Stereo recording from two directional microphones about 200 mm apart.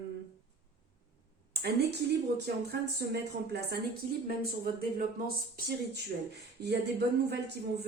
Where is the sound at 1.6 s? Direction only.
55° right (ahead or behind).